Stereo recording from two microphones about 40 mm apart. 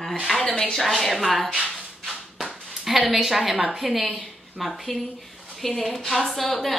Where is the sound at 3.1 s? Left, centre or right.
Centre.